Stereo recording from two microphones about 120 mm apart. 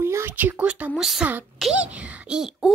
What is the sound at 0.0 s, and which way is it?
A woman's voice, 20° right (ahead or behind).